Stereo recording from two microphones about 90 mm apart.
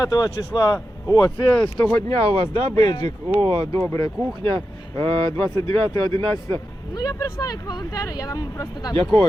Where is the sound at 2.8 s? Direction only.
55° left (ahead or behind).